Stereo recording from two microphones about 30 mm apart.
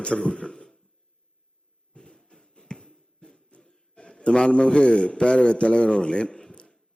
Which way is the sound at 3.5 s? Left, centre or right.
Left.